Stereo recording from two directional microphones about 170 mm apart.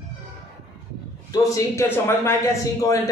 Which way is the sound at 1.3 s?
20° left (ahead or behind).